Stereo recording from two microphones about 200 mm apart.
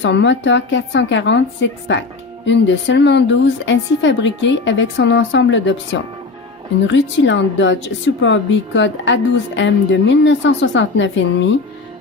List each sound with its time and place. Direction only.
0.0 s a woman's voice: 65° left (ahead or behind)